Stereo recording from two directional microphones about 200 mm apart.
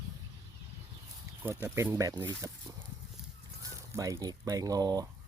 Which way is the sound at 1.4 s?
10° right (ahead or behind).